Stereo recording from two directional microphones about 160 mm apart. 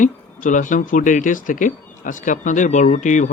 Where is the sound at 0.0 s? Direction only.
55° left (ahead or behind).